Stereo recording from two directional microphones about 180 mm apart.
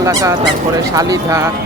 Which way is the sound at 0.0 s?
20° right (ahead or behind).